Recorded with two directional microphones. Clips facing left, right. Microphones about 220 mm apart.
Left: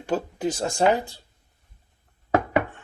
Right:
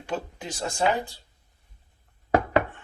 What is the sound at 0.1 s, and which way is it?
Speech, 40° left (ahead or behind).